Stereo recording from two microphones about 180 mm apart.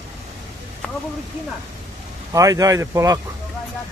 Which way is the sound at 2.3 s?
20° right (ahead or behind).